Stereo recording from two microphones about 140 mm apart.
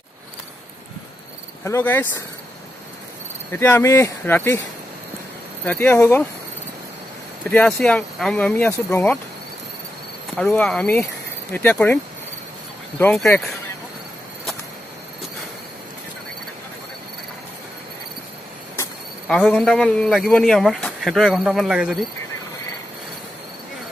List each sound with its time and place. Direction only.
1.6 s speech: 15° left (ahead or behind)
3.5 s speech: 15° left (ahead or behind)
5.7 s speech: 15° left (ahead or behind)
7.4 s speech: 5° left (ahead or behind)
10.3 s speech: 10° left (ahead or behind)
13.0 s a man's voice: 5° left (ahead or behind)
19.2 s a man's voice: 5° left (ahead or behind)